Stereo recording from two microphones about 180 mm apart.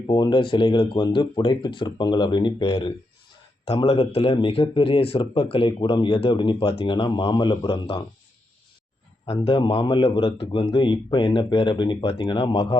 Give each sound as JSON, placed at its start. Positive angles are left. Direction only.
{"t": 0.1, "sound": "a man's voice", "side_deg": 25}
{"t": 9.5, "sound": "a man's voice", "side_deg": 25}